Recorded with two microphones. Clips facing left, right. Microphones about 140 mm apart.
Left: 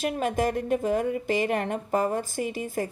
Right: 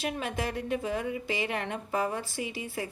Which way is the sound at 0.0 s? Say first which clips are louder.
Left 7 dB; 45° left (ahead or behind).